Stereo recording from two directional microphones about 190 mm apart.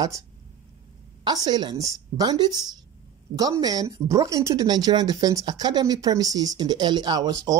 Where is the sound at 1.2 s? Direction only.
20° right (ahead or behind).